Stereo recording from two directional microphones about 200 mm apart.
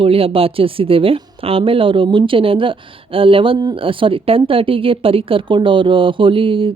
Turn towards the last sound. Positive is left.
turn(degrees=-25)  # may be behind; listen again after turning